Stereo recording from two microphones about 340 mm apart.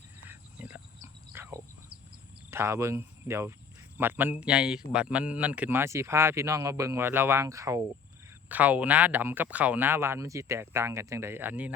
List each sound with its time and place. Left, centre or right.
0.3 s wild animals: centre
1.0 s cricket: centre
2.5 s speech: centre